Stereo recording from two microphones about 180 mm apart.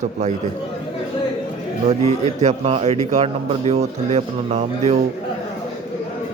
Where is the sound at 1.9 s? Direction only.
40° right (ahead or behind).